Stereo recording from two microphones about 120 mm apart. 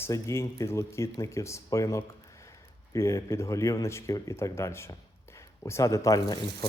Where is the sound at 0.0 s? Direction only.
25° left (ahead or behind).